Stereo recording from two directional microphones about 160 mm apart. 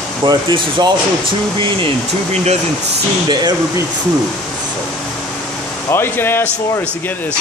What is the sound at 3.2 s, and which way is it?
Speech, 30° right (ahead or behind).